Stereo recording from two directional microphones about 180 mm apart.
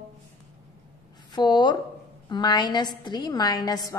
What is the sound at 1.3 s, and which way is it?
A woman's voice, 25° left (ahead or behind).